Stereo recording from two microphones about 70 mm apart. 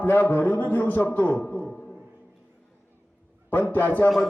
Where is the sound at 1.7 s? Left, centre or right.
Centre.